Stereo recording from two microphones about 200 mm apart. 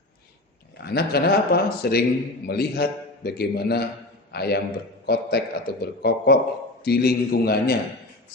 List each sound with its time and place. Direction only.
0.8 s a man's voice: 55° left (ahead or behind)